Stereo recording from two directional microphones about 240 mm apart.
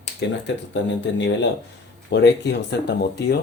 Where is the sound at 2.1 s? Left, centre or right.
Left.